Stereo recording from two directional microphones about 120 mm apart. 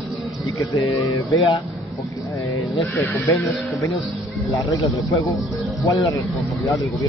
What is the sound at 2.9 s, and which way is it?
Speech, 15° left (ahead or behind).